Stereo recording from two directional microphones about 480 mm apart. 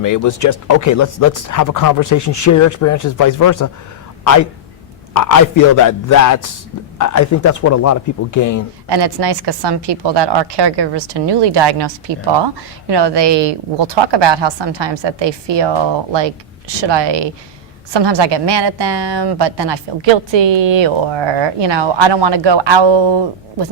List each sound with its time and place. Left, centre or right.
0.0 s speech: left
8.9 s a woman's voice: right
16.8 s a woman's voice: right